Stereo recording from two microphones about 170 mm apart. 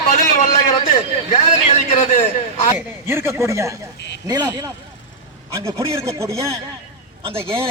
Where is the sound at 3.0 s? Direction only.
15° right (ahead or behind).